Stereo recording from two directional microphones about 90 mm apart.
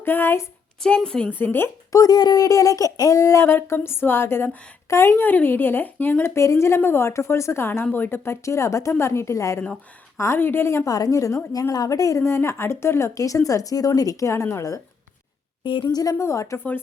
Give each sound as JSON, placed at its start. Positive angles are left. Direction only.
{"t": 0.0, "sound": "a woman's voice", "side_deg": 25}
{"t": 0.8, "sound": "a woman's voice", "side_deg": 10}
{"t": 1.3, "sound": "a woman's voice", "side_deg": 20}
{"t": 1.9, "sound": "a woman's voice", "side_deg": 40}
{"t": 10.9, "sound": "speech", "side_deg": 40}
{"t": 15.6, "sound": "a woman's voice", "side_deg": 65}
{"t": 15.9, "sound": "a woman's voice", "side_deg": 45}
{"t": 16.1, "sound": "speech", "side_deg": 30}